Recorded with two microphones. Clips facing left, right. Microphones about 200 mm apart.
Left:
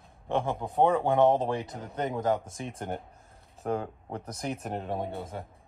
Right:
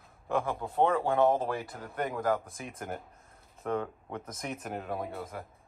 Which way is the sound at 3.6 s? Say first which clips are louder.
Left 1 dB; 35° left (ahead or behind).